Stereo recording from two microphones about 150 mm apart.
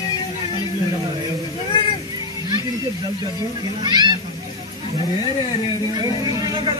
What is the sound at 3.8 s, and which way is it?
Speech, 30° right (ahead or behind).